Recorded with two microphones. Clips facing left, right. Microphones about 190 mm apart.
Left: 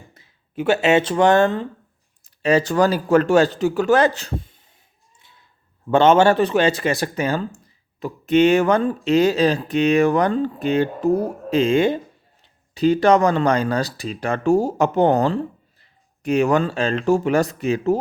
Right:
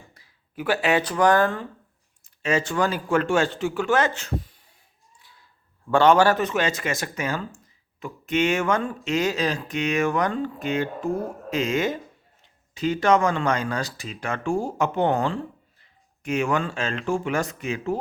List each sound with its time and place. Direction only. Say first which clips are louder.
0.1 s speech: left 8 dB; 25° left (ahead or behind)
2.2 s speech: left 6 dB; 35° left (ahead or behind)
5.9 s speech: left 3 dB; 20° left (ahead or behind); by 18.0 s 40° left (ahead or behind)